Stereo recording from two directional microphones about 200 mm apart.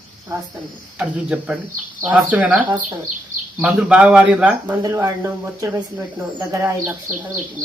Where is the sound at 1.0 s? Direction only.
5° right (ahead or behind).